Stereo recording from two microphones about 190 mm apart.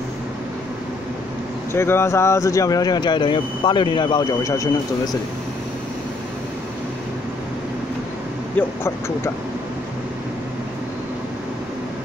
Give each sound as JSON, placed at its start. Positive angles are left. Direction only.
{"t": 1.7, "sound": "speech", "side_deg": 15}
{"t": 8.5, "sound": "speech", "side_deg": 15}